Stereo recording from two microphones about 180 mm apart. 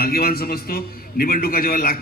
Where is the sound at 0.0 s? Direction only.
55° left (ahead or behind).